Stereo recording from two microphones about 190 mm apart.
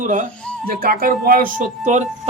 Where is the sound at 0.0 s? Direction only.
40° right (ahead or behind).